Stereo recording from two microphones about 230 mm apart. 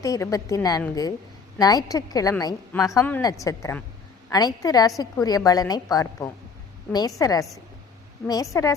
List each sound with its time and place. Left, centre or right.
0.0 s a woman's voice: centre